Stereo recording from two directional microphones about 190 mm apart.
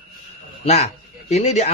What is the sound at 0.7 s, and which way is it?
Speech, 35° left (ahead or behind).